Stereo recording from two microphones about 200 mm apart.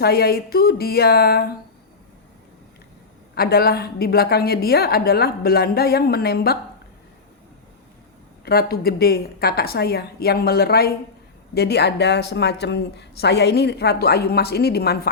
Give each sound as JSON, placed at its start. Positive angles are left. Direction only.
{"t": 0.0, "sound": "a woman's voice", "side_deg": 50}
{"t": 3.3, "sound": "a woman's voice", "side_deg": 50}
{"t": 8.4, "sound": "a woman's voice", "side_deg": 50}